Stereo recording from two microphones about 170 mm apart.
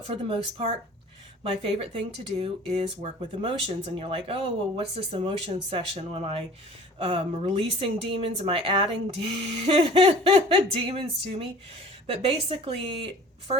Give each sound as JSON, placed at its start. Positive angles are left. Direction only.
{"t": 0.1, "sound": "a woman's voice", "side_deg": -35}